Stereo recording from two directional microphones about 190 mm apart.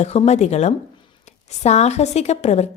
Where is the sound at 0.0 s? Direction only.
35° left (ahead or behind).